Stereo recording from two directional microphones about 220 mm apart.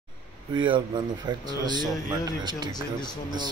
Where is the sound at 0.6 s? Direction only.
20° right (ahead or behind).